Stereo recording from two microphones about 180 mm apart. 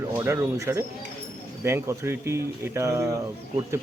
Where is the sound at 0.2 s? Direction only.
15° right (ahead or behind).